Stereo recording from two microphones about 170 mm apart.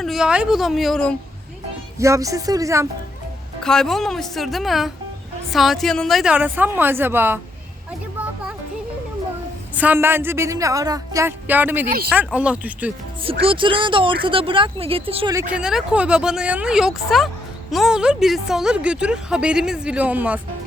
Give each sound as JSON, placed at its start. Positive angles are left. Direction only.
{"t": 0.0, "sound": "a woman's voice", "side_deg": 0}
{"t": 2.0, "sound": "speech", "side_deg": -20}
{"t": 3.6, "sound": "a woman's voice", "side_deg": 5}
{"t": 9.7, "sound": "speech", "side_deg": -10}
{"t": 13.2, "sound": "speech", "side_deg": -30}
{"t": 15.3, "sound": "speech", "side_deg": -15}
{"t": 15.5, "sound": "a woman's voice", "side_deg": -5}